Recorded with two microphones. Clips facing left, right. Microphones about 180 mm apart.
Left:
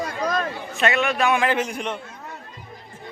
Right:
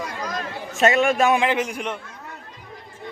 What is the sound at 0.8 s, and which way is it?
Speech, 40° right (ahead or behind).